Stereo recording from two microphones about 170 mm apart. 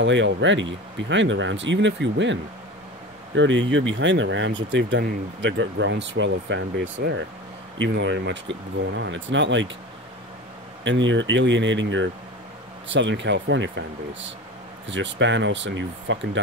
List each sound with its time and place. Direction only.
0.0 s speech: 90° right
3.3 s speech: 90° right
10.8 s speech: 90° right
14.9 s speech: 90° right